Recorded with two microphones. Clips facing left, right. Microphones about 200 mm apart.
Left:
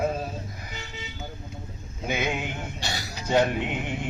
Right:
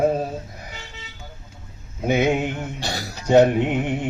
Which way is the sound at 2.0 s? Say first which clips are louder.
Right 9 dB; 55° right (ahead or behind).